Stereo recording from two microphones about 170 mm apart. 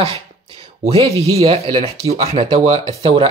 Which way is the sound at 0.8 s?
35° right (ahead or behind).